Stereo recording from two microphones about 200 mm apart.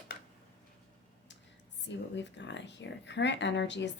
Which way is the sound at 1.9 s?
60° left (ahead or behind).